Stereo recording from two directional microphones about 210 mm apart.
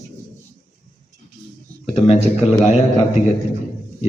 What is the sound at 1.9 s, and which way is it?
A man's voice, 25° left (ahead or behind).